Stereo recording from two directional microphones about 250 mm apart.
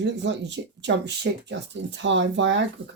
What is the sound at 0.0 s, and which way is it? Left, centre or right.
Speech, right.